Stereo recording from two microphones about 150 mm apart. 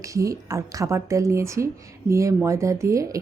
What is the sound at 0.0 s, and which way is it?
Speech, 20° right (ahead or behind).